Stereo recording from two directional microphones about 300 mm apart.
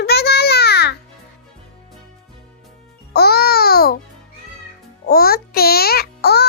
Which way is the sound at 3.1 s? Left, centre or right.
Left.